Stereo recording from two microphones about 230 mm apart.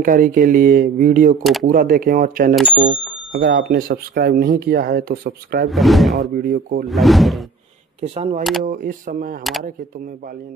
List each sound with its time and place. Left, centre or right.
0.0 s speech: right
1.4 s speech: centre
1.7 s speech: right
2.7 s speech: right
3.3 s speech: right
5.7 s speech: centre
6.3 s speech: right
6.9 s speech: centre
8.0 s speech: right
9.4 s speech: centre